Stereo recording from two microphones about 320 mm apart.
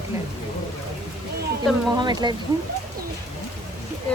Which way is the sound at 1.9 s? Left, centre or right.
Centre.